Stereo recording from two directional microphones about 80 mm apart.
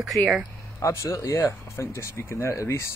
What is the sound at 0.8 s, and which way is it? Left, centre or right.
Speech, left.